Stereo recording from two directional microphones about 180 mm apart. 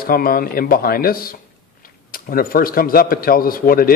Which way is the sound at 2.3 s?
55° left (ahead or behind).